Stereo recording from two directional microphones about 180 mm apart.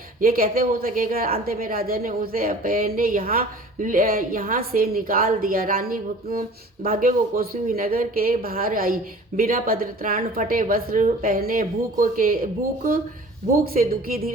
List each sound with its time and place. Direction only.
0.2 s a woman's voice: 55° right (ahead or behind)